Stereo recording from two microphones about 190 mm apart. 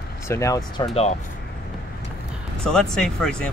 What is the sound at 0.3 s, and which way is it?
Speech, 15° left (ahead or behind).